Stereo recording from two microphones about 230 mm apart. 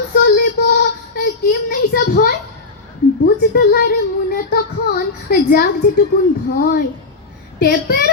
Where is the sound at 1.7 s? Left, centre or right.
Left.